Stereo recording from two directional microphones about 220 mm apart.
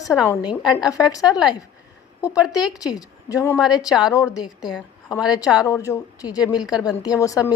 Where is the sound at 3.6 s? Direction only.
Centre (ahead or behind).